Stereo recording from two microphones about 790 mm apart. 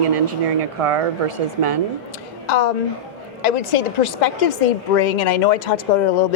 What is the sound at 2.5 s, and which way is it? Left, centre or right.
A woman's voice, left.